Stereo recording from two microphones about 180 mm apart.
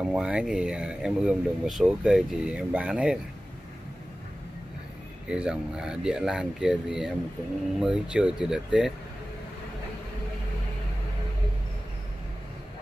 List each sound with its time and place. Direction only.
0.0 s speech: 5° right (ahead or behind)
5.3 s speech: 5° right (ahead or behind)